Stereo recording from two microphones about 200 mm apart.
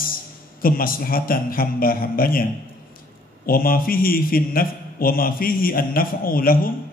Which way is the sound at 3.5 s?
45° left (ahead or behind).